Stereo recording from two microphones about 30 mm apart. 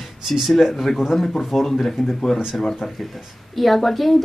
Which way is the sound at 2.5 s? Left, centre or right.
Centre.